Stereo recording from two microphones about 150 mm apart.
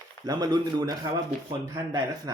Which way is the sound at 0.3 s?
25° right (ahead or behind).